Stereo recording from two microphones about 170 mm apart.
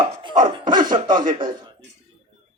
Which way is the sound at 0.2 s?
30° right (ahead or behind).